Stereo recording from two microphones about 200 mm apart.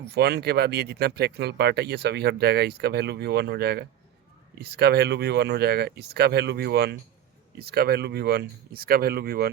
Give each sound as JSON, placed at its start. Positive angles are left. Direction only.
{"t": 0.1, "sound": "speech", "side_deg": -55}